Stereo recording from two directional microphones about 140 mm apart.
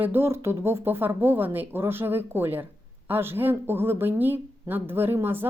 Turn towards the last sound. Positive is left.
turn(degrees=-15)  # may be behind; listen again after turning